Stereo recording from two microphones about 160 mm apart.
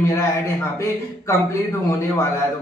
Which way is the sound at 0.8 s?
20° left (ahead or behind).